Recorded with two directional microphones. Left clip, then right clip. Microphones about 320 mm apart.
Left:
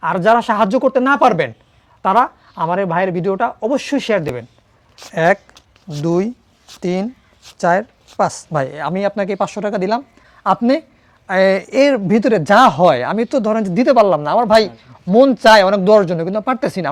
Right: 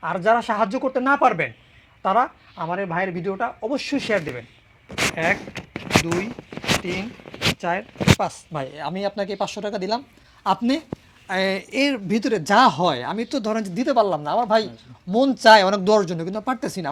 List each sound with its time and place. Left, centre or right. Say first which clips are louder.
0.0 s speech: left 6 dB; left
3.7 s speech: left 4 dB; left
5.1 s speech: left 11 dB; left
7.6 s speech: left 8 dB; left
10.4 s speech: left 7 dB; centre